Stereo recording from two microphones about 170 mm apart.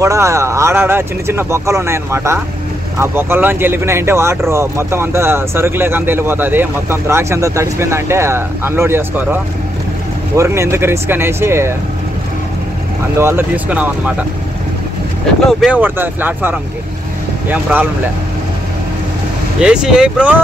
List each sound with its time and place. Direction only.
0.0 s speech: 20° right (ahead or behind)
13.2 s speech: 10° right (ahead or behind)
15.6 s speech: 10° right (ahead or behind)
19.6 s speech: 5° right (ahead or behind)